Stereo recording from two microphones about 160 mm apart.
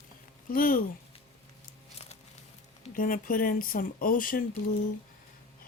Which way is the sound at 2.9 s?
60° left (ahead or behind).